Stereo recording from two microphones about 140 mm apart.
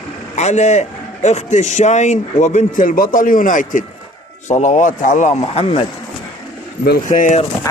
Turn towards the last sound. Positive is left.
turn(degrees=65)  # may be behind; listen again after turning